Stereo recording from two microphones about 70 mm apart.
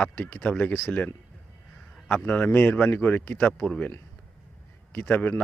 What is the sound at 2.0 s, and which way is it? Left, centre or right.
Speech, centre.